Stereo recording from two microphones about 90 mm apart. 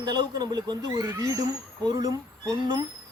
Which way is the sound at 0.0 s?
50° right (ahead or behind).